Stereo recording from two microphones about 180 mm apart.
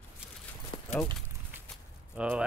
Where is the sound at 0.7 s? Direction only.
30° left (ahead or behind).